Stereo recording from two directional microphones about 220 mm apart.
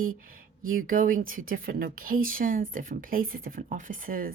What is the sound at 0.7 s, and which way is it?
Speech, 40° right (ahead or behind).